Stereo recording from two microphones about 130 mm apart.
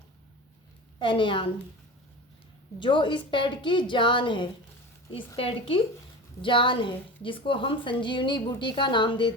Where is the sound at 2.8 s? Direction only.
40° left (ahead or behind).